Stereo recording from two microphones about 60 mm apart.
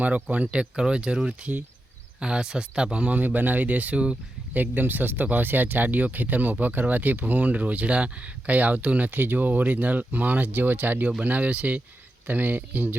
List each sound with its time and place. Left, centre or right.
0.0 s speech: right
4.5 s speech: right